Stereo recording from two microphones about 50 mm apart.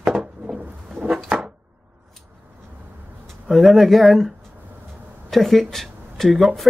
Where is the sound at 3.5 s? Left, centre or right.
Centre.